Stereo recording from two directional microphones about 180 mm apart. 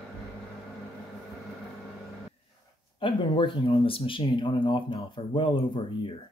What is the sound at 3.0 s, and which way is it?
Speech, 30° left (ahead or behind).